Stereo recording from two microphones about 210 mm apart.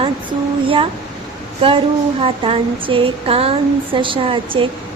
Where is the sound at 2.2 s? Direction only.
25° right (ahead or behind).